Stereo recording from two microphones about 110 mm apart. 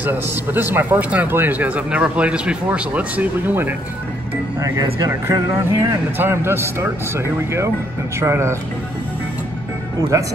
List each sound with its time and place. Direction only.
0.0 s speech: 15° right (ahead or behind)
4.6 s speech: 30° right (ahead or behind)
6.1 s speech: 20° right (ahead or behind)